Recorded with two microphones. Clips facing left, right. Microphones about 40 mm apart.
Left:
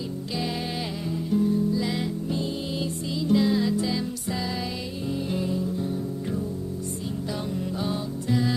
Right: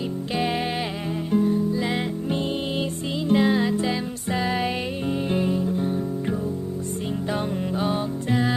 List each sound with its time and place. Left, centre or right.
1.3 s music: right
7.8 s music: right